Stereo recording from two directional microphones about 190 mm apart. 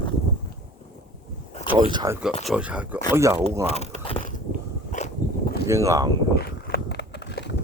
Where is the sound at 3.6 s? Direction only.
35° left (ahead or behind).